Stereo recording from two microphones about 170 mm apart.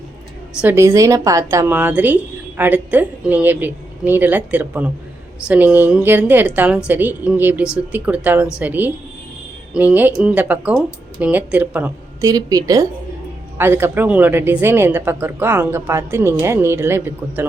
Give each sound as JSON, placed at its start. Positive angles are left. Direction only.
{"t": 0.6, "sound": "a woman's voice", "side_deg": -15}
{"t": 12.3, "sound": "a woman's voice", "side_deg": -20}